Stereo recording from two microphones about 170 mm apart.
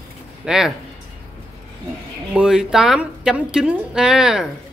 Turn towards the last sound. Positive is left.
turn(degrees=-5)  # may be behind; listen again after turning